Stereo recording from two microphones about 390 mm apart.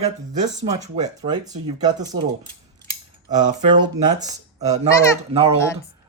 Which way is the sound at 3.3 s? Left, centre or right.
Centre.